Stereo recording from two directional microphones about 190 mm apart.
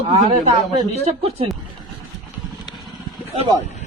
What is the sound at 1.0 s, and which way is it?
Speech, 30° right (ahead or behind).